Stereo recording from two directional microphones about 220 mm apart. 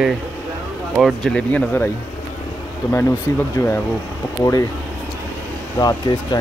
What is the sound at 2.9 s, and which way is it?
Speech, 10° left (ahead or behind).